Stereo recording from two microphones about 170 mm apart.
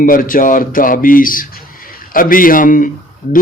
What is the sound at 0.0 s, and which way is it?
Speech, 55° left (ahead or behind).